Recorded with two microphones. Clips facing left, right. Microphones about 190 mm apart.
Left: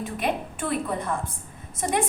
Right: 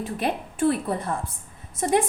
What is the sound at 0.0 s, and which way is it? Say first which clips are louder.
A woman's voice: even; 35° right (ahead or behind).